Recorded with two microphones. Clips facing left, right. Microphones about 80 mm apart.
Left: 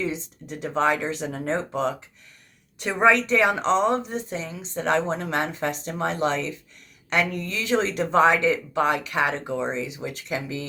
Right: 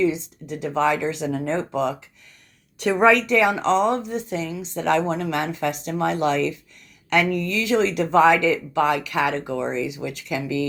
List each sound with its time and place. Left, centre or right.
0.0 s a woman's voice: left
2.7 s a woman's voice: left